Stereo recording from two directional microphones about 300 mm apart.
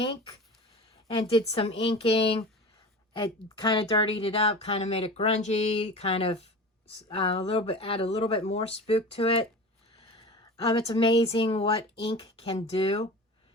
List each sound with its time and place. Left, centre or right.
0.0 s speech: centre
10.7 s speech: centre